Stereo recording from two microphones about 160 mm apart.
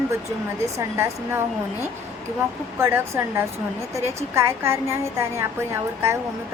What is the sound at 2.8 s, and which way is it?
A woman's voice, 15° right (ahead or behind).